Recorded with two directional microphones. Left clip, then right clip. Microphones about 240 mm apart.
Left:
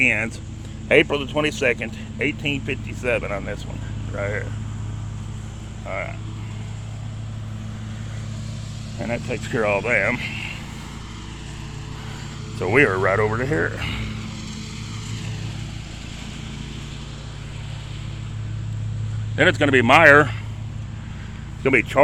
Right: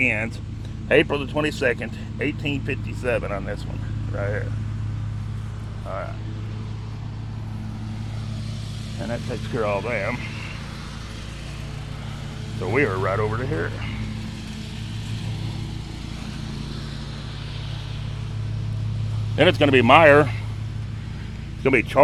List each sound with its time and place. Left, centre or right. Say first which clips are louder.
0.0 s speech: left 3 dB; centre
9.1 s speech: left 4 dB; centre
9.5 s speech: left 4 dB; left
12.5 s speech: left 5 dB; left
14.0 s vehicle: left 2 dB; centre
16.2 s vehicle: even; centre
19.4 s speech: even; centre
21.6 s speech: left 1 dB; centre